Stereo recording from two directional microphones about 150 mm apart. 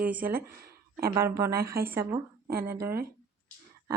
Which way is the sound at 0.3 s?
90° right.